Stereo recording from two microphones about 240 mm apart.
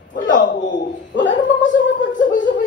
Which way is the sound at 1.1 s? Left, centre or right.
Left.